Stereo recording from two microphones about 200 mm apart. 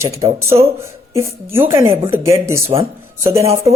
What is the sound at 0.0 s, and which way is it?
Speech, 15° right (ahead or behind).